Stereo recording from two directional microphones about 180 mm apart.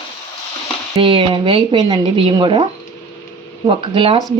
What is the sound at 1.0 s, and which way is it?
Speech, 30° right (ahead or behind).